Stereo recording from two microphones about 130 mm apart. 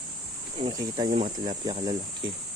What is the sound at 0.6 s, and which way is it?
Speech, 45° right (ahead or behind).